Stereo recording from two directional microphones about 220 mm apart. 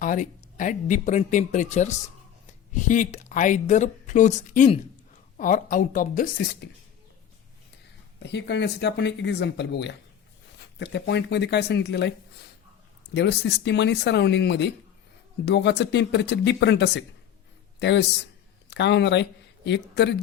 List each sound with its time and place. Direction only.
0.0 s speech: 35° left (ahead or behind)
8.2 s speech: 50° left (ahead or behind)
13.1 s speech: 50° left (ahead or behind)